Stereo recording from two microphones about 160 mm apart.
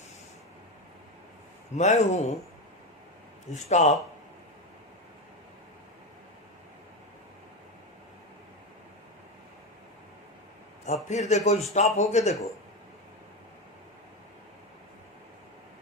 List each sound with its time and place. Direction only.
1.7 s a man's voice: 45° left (ahead or behind)
3.5 s a man's voice: 45° left (ahead or behind)
10.8 s a man's voice: 45° left (ahead or behind)